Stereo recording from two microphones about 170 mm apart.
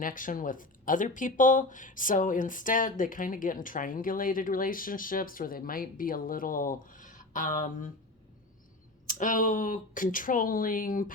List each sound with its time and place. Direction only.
0.0 s speech: 50° left (ahead or behind)
9.0 s speech: 50° left (ahead or behind)